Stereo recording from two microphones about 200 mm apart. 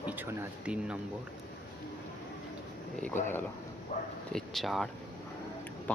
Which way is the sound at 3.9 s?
40° left (ahead or behind).